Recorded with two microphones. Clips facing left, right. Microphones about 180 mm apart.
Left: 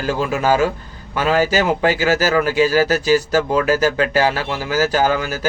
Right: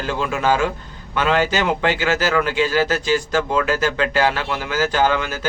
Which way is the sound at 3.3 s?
40° left (ahead or behind).